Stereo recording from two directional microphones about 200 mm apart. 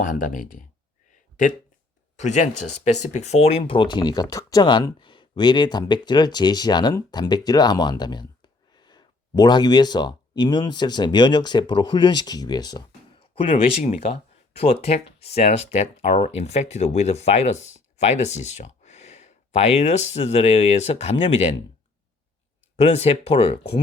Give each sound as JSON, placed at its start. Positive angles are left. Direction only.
{"t": 0.0, "sound": "speech", "side_deg": 40}
{"t": 2.1, "sound": "speech", "side_deg": 35}
{"t": 22.8, "sound": "speech", "side_deg": 30}